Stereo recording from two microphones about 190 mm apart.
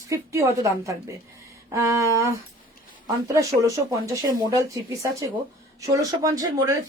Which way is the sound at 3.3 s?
15° right (ahead or behind).